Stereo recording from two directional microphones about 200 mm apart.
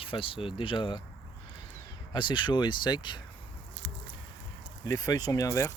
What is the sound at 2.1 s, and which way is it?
Speech, 25° left (ahead or behind).